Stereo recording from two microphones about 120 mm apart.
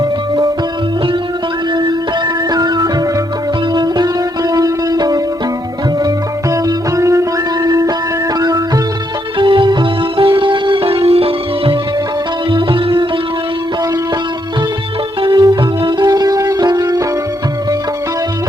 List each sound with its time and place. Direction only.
0.0 s music: 35° right (ahead or behind)
1.7 s music: 35° right (ahead or behind)
9.4 s music: 45° right (ahead or behind)
15.3 s music: 30° right (ahead or behind)